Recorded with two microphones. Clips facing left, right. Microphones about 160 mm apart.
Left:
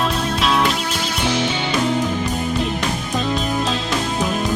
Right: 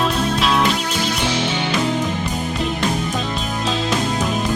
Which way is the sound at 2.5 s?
Centre (ahead or behind).